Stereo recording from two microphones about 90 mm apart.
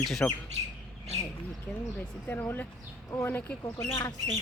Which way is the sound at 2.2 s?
20° left (ahead or behind).